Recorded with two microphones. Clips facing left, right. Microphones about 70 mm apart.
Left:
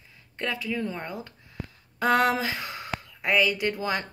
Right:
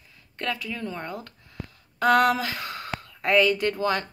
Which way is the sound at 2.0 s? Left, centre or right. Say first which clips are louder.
Right 3 dB; left.